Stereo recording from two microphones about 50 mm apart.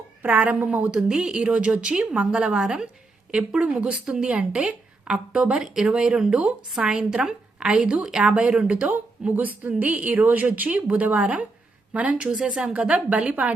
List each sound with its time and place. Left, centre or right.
0.2 s a woman's voice: right
9.3 s a woman's voice: right
12.2 s a woman's voice: centre
12.7 s a woman's voice: right